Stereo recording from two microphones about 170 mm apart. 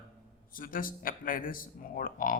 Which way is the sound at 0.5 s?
55° left (ahead or behind).